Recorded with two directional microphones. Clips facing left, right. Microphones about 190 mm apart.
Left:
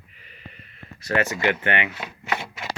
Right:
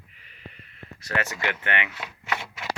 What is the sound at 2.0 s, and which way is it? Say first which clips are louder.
Speech: left 3 dB; 20° left (ahead or behind).